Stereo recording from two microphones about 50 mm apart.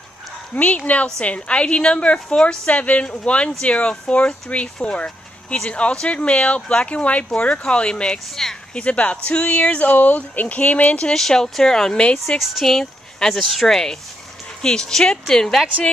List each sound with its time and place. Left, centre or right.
0.6 s a woman's voice: left; by 8.5 s centre
8.7 s speech: left
11.1 s a woman's voice: centre
12.4 s a woman's voice: centre